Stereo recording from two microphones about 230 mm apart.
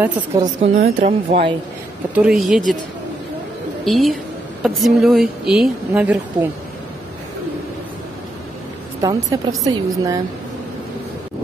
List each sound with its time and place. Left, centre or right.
0.6 s speech: right
2.1 s speech: centre
3.8 s speech: centre
9.0 s a woman's voice: centre